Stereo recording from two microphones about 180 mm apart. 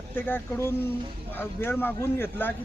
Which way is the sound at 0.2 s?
10° left (ahead or behind).